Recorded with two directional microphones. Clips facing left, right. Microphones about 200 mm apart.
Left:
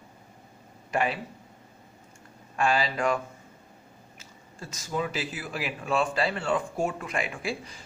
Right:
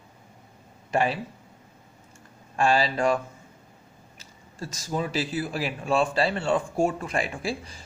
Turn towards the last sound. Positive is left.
turn(degrees=-35)  # may be behind; listen again after turning